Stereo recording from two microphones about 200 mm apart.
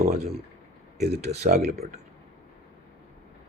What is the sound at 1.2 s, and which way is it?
Speech, 35° right (ahead or behind).